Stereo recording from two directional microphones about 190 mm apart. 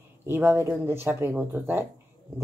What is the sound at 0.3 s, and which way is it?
Speech, 10° right (ahead or behind).